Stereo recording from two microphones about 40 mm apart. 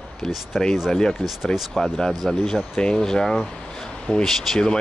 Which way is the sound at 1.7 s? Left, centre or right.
Centre.